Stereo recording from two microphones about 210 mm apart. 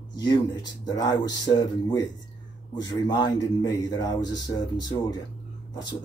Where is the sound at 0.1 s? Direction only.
20° left (ahead or behind).